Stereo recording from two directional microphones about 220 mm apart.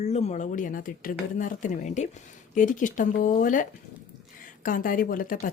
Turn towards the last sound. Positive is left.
turn(degrees=40)  # may be behind; listen again after turning